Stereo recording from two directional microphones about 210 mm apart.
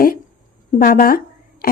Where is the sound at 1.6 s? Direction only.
45° left (ahead or behind).